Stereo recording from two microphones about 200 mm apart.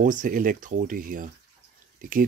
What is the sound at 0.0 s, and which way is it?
Speech, 40° right (ahead or behind).